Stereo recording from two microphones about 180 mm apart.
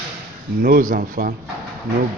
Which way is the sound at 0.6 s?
50° right (ahead or behind).